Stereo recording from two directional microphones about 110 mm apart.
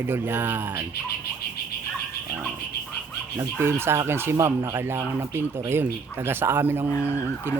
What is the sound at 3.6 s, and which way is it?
Speech, 20° right (ahead or behind).